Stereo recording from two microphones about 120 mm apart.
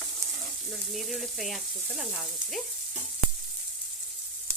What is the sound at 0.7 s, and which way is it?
Sizzle, centre (ahead or behind).